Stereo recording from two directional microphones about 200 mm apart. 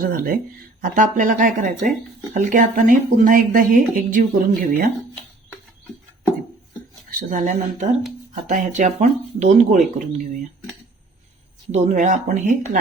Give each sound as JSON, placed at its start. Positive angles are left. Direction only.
{"t": 0.0, "sound": "speech", "side_deg": -45}
{"t": 7.1, "sound": "speech", "side_deg": -40}
{"t": 11.7, "sound": "speech", "side_deg": -35}